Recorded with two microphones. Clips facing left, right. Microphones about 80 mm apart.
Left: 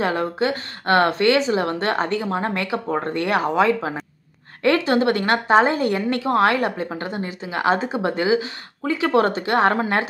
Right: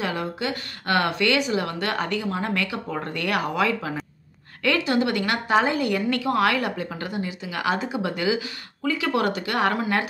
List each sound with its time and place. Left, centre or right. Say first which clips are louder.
0.0 s speech: left 6 dB; left